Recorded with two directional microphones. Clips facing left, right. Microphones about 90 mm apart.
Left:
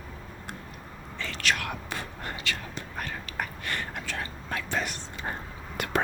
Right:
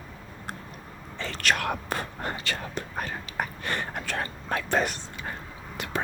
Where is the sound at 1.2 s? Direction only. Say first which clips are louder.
Right 2 dB; 35° right (ahead or behind).